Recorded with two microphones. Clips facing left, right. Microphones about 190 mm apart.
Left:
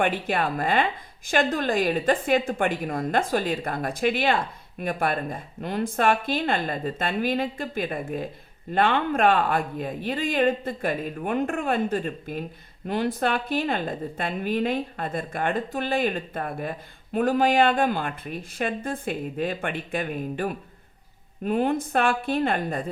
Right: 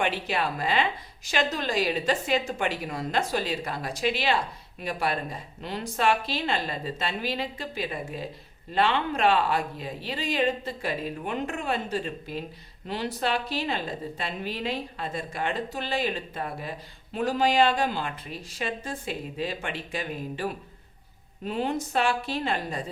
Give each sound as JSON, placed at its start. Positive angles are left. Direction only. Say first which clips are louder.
{"t": 0.0, "sound": "a woman's voice", "louder": "left 3 dB", "side_deg": 50}